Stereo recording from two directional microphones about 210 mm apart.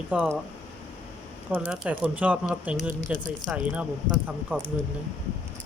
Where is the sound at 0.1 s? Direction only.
5° right (ahead or behind).